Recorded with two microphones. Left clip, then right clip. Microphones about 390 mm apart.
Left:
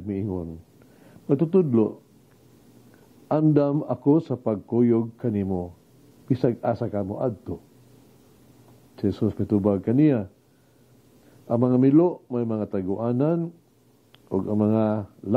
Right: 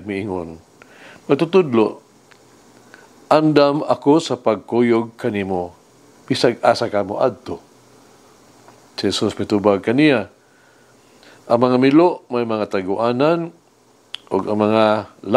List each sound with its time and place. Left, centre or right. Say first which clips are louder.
0.0 s speech: right 6 dB; centre
3.3 s speech: right 8 dB; centre
8.9 s speech: right 7 dB; centre
11.4 s speech: right 7 dB; centre